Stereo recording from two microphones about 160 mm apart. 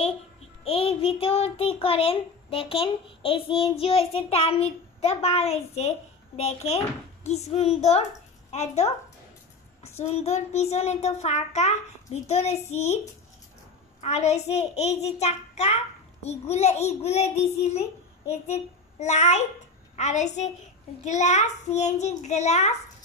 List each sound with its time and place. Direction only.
0.7 s a child's voice: 40° left (ahead or behind)
9.9 s a child's voice: 40° left (ahead or behind)
14.0 s a child's voice: 45° left (ahead or behind)
18.9 s a child's voice: 45° left (ahead or behind)